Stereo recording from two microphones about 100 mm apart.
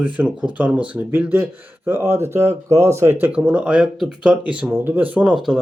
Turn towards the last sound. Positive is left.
turn(degrees=-15)  # may be behind; listen again after turning